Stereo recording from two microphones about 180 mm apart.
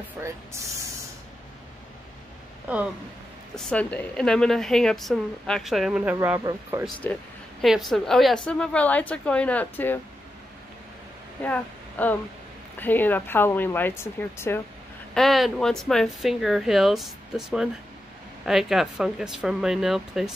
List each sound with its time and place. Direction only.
0.2 s speech: 15° right (ahead or behind)
2.7 s speech: 5° right (ahead or behind)
3.5 s a woman's voice: 5° left (ahead or behind); by 6.8 s 15° right (ahead or behind)
7.0 s a woman's voice: 10° left (ahead or behind)
11.4 s speech: 10° left (ahead or behind)
15.1 s a woman's voice: centre (ahead or behind)